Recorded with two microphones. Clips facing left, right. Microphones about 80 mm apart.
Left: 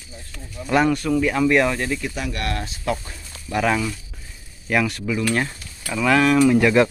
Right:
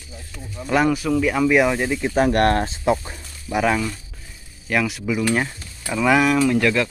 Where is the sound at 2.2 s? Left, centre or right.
Right.